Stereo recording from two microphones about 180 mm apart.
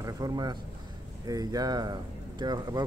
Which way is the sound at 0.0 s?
20° right (ahead or behind).